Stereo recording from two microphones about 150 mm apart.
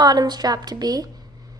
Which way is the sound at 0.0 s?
25° right (ahead or behind).